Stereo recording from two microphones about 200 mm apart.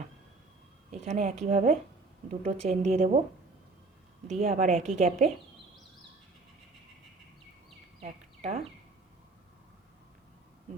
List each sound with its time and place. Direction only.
0.9 s a woman's voice: 35° right (ahead or behind)
4.3 s a woman's voice: 35° right (ahead or behind)
8.4 s speech: 35° right (ahead or behind)